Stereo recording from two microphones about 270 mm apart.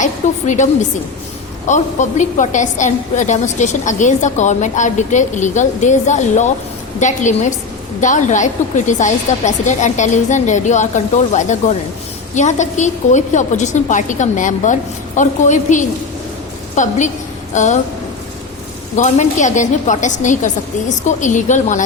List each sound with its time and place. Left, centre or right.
0.0 s a woman's voice: left
18.9 s a woman's voice: left